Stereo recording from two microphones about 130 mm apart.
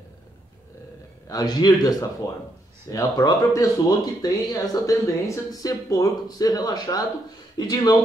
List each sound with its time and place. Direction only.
1.2 s speech: 30° left (ahead or behind)